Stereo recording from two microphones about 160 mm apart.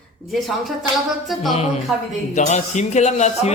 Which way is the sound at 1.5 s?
45° left (ahead or behind).